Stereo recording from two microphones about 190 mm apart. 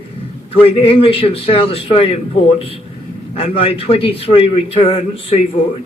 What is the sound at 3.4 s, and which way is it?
A man's voice, 30° left (ahead or behind).